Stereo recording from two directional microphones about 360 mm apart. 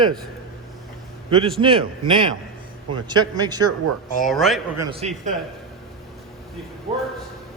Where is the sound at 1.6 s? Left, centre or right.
Centre.